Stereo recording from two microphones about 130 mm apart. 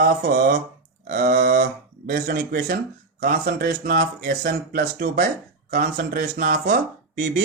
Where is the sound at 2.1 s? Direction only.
70° right (ahead or behind).